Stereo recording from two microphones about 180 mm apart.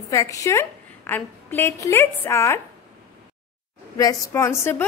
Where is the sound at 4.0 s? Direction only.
15° left (ahead or behind).